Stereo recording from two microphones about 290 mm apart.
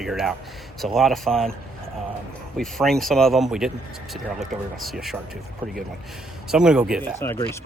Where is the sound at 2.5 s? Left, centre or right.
Centre.